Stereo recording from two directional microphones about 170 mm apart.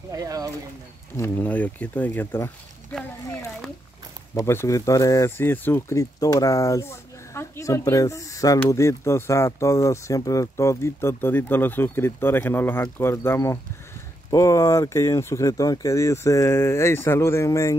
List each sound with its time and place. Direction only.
0.1 s speech: 20° right (ahead or behind)
1.1 s speech: 10° left (ahead or behind)
4.4 s speech: 15° left (ahead or behind)